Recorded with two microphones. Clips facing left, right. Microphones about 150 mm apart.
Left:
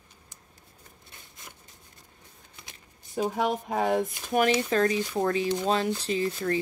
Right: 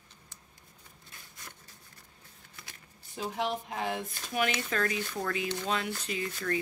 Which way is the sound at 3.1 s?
50° left (ahead or behind).